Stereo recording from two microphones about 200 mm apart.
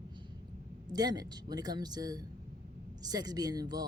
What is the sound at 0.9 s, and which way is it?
Speech, 20° right (ahead or behind).